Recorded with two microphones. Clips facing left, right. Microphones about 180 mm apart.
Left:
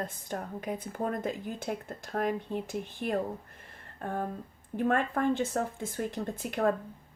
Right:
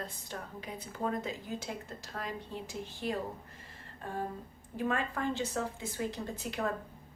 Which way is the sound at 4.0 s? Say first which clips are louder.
Left 4 dB; 55° left (ahead or behind).